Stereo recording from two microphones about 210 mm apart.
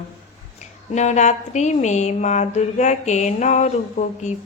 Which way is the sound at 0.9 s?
35° left (ahead or behind).